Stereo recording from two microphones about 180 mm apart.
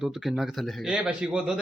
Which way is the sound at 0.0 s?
5° right (ahead or behind).